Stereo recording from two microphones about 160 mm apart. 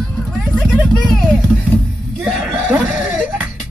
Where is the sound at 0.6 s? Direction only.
Centre (ahead or behind).